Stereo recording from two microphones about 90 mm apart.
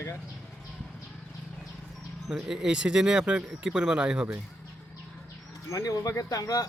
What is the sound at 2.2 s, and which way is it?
Speech, 5° right (ahead or behind).